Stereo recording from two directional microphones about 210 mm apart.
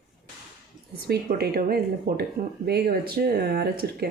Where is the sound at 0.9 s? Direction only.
50° right (ahead or behind).